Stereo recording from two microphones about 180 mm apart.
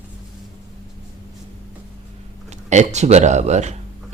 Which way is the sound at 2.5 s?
40° right (ahead or behind).